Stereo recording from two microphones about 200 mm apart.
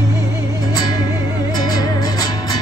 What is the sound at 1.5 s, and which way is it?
Music, 20° left (ahead or behind).